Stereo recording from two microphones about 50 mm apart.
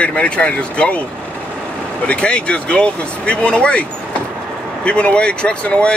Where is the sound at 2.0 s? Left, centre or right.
Left.